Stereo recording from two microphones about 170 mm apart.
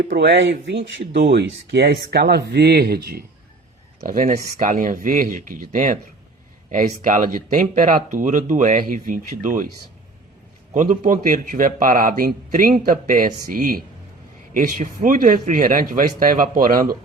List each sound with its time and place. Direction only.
0.0 s speech: 90° right; by 3.2 s 65° right (ahead or behind)
4.0 s speech: 55° right (ahead or behind)
10.8 s speech: 55° right (ahead or behind)